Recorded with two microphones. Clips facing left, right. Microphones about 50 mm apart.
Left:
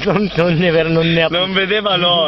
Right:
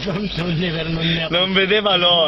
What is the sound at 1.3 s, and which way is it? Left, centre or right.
Speech, centre.